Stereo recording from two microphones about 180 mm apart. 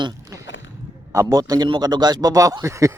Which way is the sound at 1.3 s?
20° right (ahead or behind).